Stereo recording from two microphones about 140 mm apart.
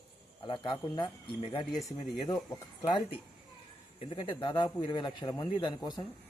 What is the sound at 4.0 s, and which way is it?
A man's voice, 40° left (ahead or behind).